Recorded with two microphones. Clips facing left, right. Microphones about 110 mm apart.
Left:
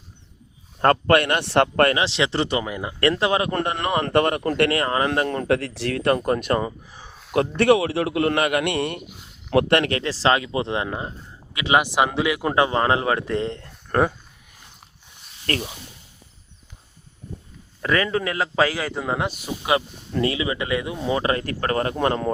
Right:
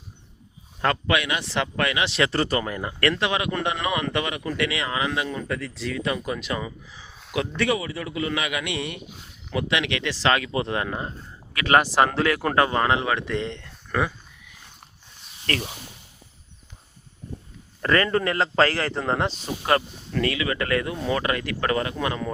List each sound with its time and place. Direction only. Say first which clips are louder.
0.8 s speech: left 6 dB; 50° left (ahead or behind)
2.0 s speech: left 1 dB; 25° left (ahead or behind)
3.0 s a man's voice: left 4 dB; 30° left (ahead or behind); by 9.8 s 60° left (ahead or behind)
9.8 s speech: left 3 dB; 40° left (ahead or behind)
17.8 s speech: right 1 dB; 5° left (ahead or behind)
20.1 s speech: left 2 dB; 25° left (ahead or behind)
21.2 s speech: left 2 dB; 30° left (ahead or behind)